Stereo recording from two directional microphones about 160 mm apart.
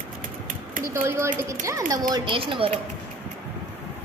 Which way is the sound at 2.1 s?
30° right (ahead or behind).